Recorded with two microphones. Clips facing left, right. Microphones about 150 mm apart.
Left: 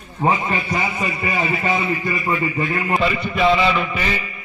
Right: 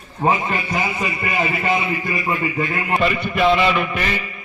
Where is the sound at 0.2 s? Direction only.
Centre (ahead or behind).